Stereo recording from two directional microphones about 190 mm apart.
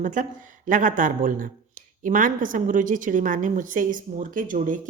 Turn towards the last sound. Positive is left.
turn(degrees=-45)  # may be behind; listen again after turning